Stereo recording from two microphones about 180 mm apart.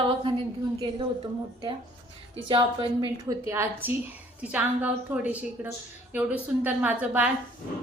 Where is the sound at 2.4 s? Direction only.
30° right (ahead or behind).